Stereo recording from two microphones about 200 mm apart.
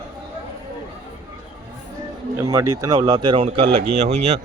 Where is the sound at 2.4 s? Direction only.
15° right (ahead or behind).